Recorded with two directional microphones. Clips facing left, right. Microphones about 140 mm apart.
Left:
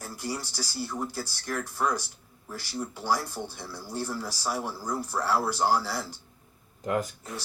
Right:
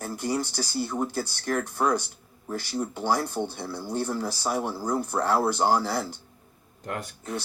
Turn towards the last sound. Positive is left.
turn(degrees=0)  # may be behind; listen again after turning